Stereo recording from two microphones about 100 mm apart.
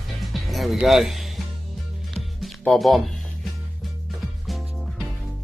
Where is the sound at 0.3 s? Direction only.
Centre (ahead or behind).